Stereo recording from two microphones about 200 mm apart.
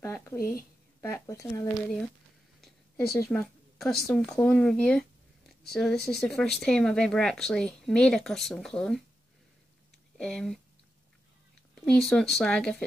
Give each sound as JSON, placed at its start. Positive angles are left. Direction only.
{"t": 0.0, "sound": "speech", "side_deg": 10}
{"t": 3.3, "sound": "a woman's voice", "side_deg": 0}
{"t": 10.1, "sound": "speech", "side_deg": 5}
{"t": 11.7, "sound": "a woman's voice", "side_deg": 5}